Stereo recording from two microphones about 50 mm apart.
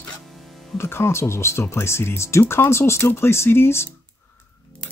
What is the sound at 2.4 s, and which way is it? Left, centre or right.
Speech, left.